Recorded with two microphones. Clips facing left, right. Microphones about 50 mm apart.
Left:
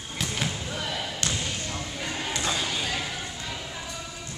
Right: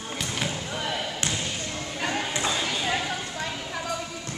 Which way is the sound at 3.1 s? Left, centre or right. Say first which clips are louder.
Right 4 dB; right.